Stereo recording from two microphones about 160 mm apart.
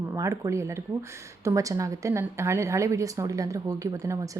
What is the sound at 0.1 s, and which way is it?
A woman's voice, 20° right (ahead or behind).